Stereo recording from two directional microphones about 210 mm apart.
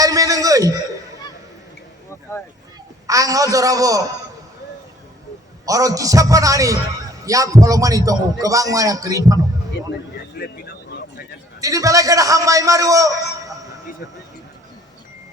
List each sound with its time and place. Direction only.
0.0 s a sound: 15° right (ahead or behind)
3.1 s a man's voice: 15° right (ahead or behind)
5.6 s a man's voice: 15° right (ahead or behind)
10.3 s vehicle: 50° left (ahead or behind)
11.6 s a man's voice: 15° right (ahead or behind)